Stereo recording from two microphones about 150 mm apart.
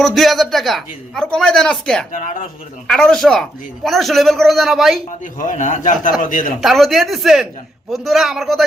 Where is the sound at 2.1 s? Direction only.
60° left (ahead or behind).